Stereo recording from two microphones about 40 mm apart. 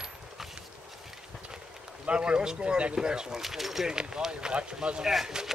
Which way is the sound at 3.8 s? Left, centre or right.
Centre.